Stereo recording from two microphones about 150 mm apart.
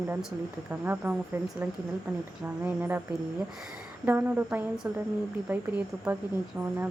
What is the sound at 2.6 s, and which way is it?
Speech, 10° right (ahead or behind).